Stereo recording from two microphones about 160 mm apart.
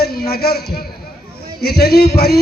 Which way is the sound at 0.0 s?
80° left.